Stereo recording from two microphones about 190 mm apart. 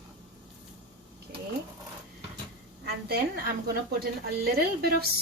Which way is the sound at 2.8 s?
55° right (ahead or behind).